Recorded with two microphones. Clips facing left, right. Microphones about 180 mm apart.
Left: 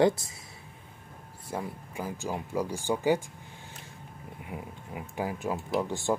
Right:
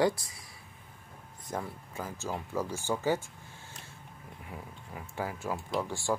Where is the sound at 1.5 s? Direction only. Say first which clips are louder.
Left 2 dB; 10° left (ahead or behind).